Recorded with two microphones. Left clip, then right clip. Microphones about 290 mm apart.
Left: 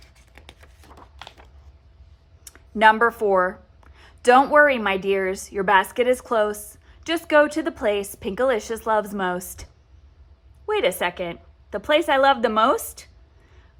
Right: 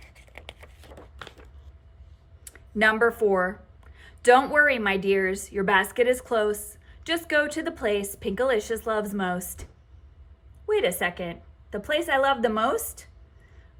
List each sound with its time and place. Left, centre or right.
0.1 s a sound: centre
2.5 s a woman's voice: centre
10.8 s a woman's voice: centre